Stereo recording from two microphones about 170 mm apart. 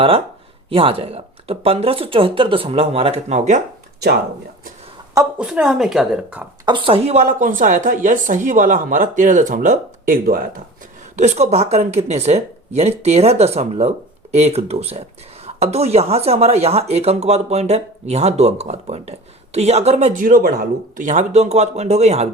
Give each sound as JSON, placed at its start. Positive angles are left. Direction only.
{"t": 0.7, "sound": "speech", "side_deg": -35}
{"t": 5.4, "sound": "speech", "side_deg": -5}
{"t": 6.7, "sound": "speech", "side_deg": -30}
{"t": 11.2, "sound": "speech", "side_deg": -40}